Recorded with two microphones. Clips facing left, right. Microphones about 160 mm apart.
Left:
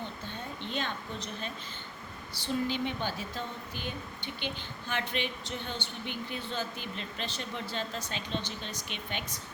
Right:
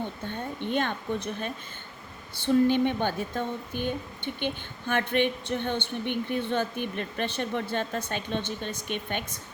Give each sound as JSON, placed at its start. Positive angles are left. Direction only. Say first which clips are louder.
{"t": 0.0, "sound": "a woman's voice", "louder": "right 6 dB", "side_deg": -55}